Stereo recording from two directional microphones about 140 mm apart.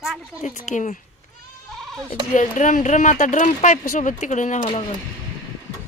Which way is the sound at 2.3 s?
65° left (ahead or behind).